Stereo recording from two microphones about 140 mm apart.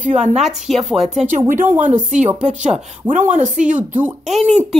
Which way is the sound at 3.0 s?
60° right (ahead or behind).